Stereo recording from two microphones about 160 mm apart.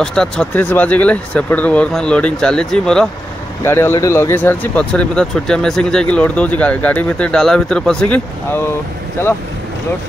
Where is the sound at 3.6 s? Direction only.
15° left (ahead or behind).